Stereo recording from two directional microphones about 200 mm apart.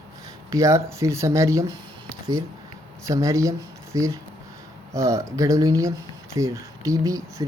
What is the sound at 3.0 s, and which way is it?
Speech, 15° right (ahead or behind).